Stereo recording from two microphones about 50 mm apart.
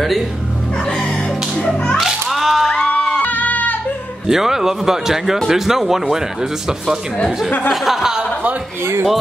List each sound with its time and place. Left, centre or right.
2.0 s music: centre
2.7 s a sound: centre
3.3 s goat: left
4.3 s speech: centre
7.7 s speech: centre